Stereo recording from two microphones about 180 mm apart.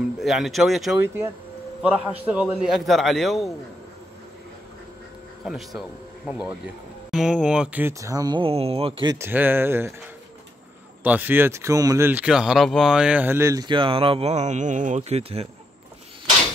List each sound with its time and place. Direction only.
0.2 s a man's voice: centre (ahead or behind)
0.9 s a man's voice: 15° right (ahead or behind)
5.8 s speech: 5° right (ahead or behind); by 9.2 s 25° right (ahead or behind)
9.2 s speech: 10° right (ahead or behind)
11.1 s speech: 10° right (ahead or behind); by 15.4 s 35° right (ahead or behind)